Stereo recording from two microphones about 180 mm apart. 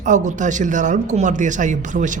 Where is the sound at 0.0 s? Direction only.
45° right (ahead or behind).